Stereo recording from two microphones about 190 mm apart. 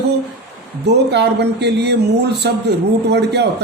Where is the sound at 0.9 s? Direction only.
60° right (ahead or behind).